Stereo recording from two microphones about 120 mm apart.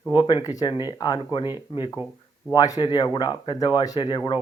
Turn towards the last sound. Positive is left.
turn(degrees=35)  # may be behind; listen again after turning